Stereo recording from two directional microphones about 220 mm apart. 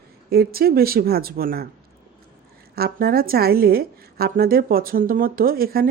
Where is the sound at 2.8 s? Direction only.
45° right (ahead or behind).